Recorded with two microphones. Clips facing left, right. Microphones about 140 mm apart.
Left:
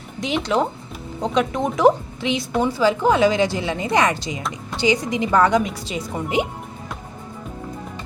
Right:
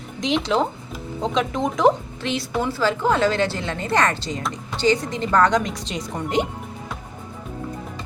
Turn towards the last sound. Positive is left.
turn(degrees=5)  # may be behind; listen again after turning